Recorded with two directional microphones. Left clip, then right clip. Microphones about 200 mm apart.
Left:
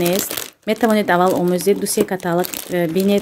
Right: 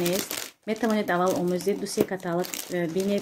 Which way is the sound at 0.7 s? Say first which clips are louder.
Left 10 dB; 55° left (ahead or behind).